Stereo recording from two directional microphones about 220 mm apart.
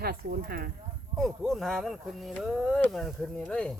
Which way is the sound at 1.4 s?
Centre (ahead or behind).